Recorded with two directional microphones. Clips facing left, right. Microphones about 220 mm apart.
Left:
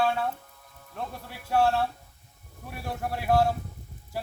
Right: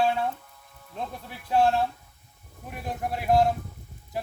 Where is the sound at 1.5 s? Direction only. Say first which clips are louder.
Right 2 dB; 15° right (ahead or behind).